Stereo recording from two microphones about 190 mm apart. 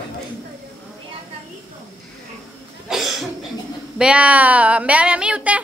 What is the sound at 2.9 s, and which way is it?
Cough, centre (ahead or behind).